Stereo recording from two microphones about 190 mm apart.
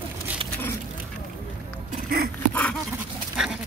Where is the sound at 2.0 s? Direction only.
55° right (ahead or behind).